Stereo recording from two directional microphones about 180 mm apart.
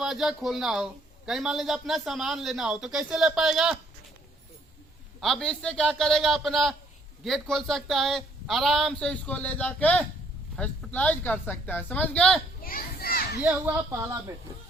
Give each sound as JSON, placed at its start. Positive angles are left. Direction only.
{"t": 0.0, "sound": "a man's voice", "side_deg": 0}
{"t": 5.2, "sound": "a man's voice", "side_deg": 0}
{"t": 12.6, "sound": "a child's voice", "side_deg": 55}
{"t": 13.9, "sound": "speech", "side_deg": -15}